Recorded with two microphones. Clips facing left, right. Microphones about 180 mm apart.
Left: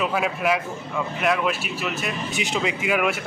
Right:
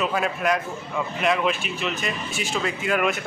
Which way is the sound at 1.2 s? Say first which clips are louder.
Even; centre (ahead or behind).